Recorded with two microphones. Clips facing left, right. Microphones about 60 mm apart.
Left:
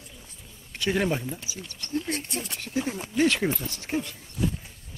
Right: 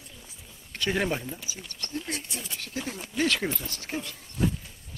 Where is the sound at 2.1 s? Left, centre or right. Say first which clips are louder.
Left 4 dB; left.